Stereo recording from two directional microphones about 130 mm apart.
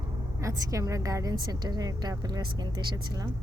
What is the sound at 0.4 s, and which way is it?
A woman's voice, 25° right (ahead or behind).